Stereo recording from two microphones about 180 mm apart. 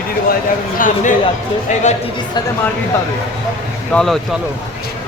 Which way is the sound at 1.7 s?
40° left (ahead or behind).